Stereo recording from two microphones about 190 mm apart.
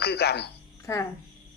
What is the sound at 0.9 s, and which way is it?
Speech, 15° left (ahead or behind).